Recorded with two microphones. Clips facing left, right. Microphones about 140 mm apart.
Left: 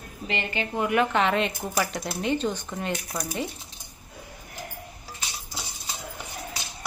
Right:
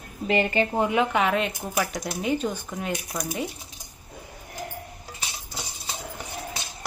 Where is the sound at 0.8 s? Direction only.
20° right (ahead or behind).